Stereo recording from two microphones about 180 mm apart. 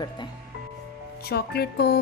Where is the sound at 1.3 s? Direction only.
65° left (ahead or behind).